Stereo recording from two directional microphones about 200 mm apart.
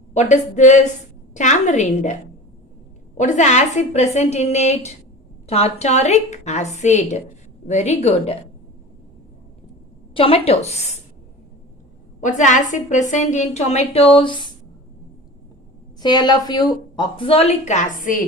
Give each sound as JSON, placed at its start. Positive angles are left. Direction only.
{"t": 0.1, "sound": "a woman's voice", "side_deg": 35}
{"t": 3.2, "sound": "a woman's voice", "side_deg": 35}
{"t": 10.2, "sound": "a woman's voice", "side_deg": 30}
{"t": 12.2, "sound": "a woman's voice", "side_deg": 40}
{"t": 16.0, "sound": "speech", "side_deg": 20}